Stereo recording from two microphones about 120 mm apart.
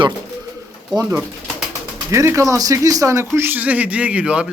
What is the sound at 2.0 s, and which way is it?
A man's voice, 25° right (ahead or behind).